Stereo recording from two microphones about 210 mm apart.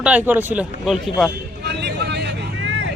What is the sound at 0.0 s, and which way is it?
Speech, 5° right (ahead or behind).